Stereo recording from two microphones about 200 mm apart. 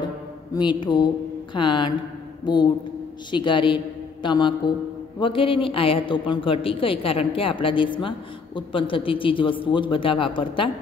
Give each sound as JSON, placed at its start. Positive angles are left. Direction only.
{"t": 0.6, "sound": "a man's voice", "side_deg": 20}